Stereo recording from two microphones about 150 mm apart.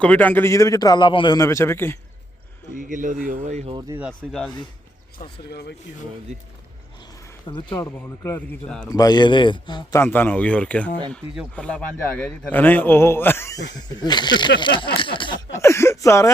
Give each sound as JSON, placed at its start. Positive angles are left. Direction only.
{"t": 0.0, "sound": "a man's voice", "side_deg": 10}
{"t": 2.7, "sound": "speech", "side_deg": -60}
{"t": 3.4, "sound": "speech", "side_deg": -50}
{"t": 4.3, "sound": "speech", "side_deg": 5}
{"t": 7.4, "sound": "speech", "side_deg": 30}
{"t": 7.8, "sound": "a man's voice", "side_deg": 15}
{"t": 8.9, "sound": "a man's voice", "side_deg": 25}
{"t": 10.0, "sound": "a man's voice", "side_deg": 10}
{"t": 13.7, "sound": "a man's voice", "side_deg": 30}
{"t": 14.9, "sound": "a sound", "side_deg": 35}
{"t": 15.5, "sound": "speech", "side_deg": 20}